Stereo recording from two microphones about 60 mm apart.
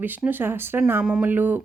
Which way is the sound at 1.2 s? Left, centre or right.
Right.